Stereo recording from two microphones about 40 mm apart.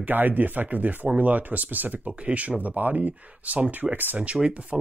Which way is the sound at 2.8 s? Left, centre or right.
Right.